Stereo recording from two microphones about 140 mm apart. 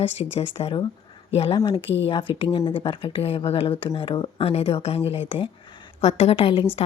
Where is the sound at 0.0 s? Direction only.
45° left (ahead or behind).